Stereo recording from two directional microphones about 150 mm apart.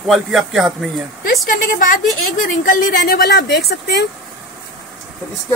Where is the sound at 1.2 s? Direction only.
65° left (ahead or behind); by 3.8 s 90° left.